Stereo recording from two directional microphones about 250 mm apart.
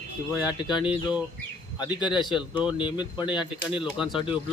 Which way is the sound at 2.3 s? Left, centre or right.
Centre.